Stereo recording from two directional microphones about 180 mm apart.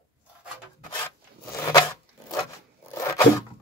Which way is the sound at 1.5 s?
15° left (ahead or behind).